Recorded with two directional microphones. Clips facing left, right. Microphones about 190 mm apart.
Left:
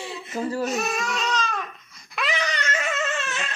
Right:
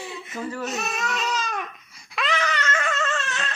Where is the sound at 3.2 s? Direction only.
Centre (ahead or behind).